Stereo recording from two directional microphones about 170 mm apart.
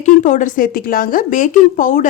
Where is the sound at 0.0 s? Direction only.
45° left (ahead or behind).